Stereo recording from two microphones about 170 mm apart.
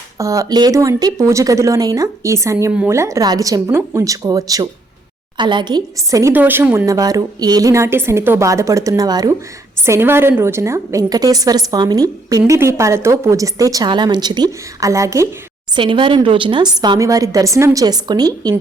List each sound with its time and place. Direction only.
0.2 s a woman's voice: 20° right (ahead or behind)
15.7 s a woman's voice: 30° right (ahead or behind)